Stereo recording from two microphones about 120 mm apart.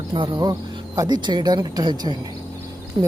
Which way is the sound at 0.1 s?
40° right (ahead or behind).